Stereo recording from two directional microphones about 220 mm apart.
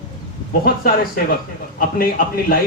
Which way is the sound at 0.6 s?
40° left (ahead or behind).